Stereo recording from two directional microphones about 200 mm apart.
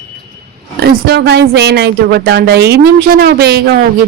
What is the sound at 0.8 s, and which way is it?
A woman's voice, 55° right (ahead or behind).